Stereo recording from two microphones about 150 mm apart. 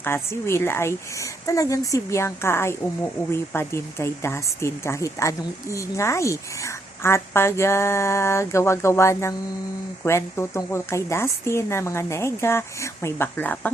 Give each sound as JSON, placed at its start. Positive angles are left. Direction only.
{"t": 0.0, "sound": "a woman's voice", "side_deg": 15}